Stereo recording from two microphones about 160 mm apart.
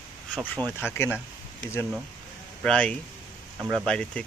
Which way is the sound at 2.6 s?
5° left (ahead or behind).